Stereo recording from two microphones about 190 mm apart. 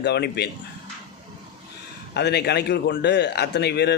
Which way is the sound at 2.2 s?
60° left (ahead or behind).